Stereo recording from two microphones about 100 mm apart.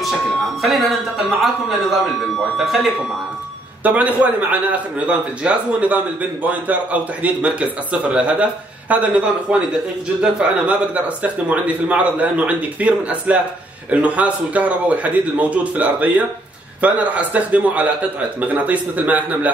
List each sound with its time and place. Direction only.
0.6 s speech: centre (ahead or behind)
3.8 s a man's voice: 15° right (ahead or behind)